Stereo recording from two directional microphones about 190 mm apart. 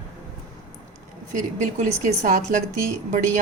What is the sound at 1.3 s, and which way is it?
Speech, 40° right (ahead or behind).